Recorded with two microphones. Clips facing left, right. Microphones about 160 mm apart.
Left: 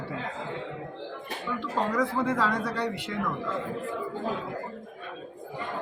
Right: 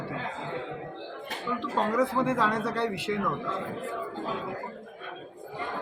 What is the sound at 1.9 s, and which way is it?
Speech, 5° right (ahead or behind).